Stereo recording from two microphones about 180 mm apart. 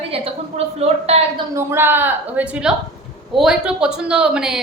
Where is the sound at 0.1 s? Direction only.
35° right (ahead or behind).